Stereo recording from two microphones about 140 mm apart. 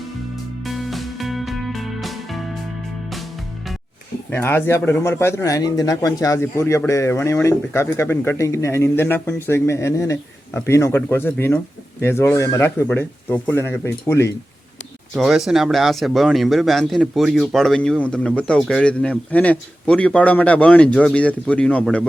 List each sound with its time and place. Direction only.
0.6 s music: centre (ahead or behind)
4.3 s speech: 15° left (ahead or behind)
15.1 s speech: centre (ahead or behind)